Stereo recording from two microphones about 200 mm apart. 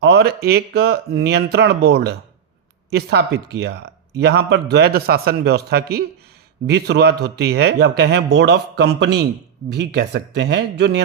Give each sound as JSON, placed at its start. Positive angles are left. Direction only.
{"t": 0.0, "sound": "speech", "side_deg": -55}